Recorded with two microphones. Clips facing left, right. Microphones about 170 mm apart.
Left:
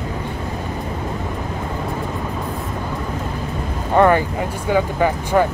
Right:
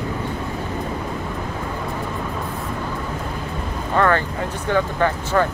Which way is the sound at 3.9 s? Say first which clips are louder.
Left 5 dB; 20° left (ahead or behind).